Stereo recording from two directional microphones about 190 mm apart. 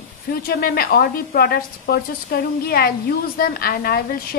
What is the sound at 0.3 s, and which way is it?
A woman's voice, 55° left (ahead or behind).